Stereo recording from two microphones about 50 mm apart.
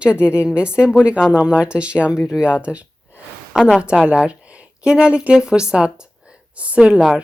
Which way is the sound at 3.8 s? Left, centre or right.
Right.